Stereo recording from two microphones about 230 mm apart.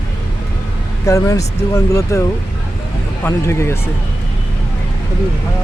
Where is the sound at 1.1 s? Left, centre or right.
Centre.